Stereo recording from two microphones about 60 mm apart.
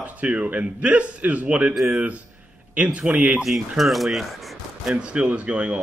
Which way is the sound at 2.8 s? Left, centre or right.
Centre.